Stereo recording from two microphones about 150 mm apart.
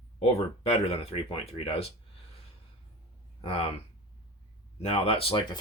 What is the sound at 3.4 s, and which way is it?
Speech, 35° left (ahead or behind).